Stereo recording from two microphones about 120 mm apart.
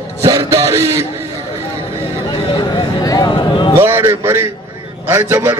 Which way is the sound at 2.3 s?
40° left (ahead or behind).